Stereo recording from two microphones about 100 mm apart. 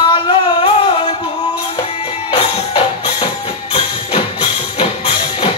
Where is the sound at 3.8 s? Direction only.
70° left (ahead or behind).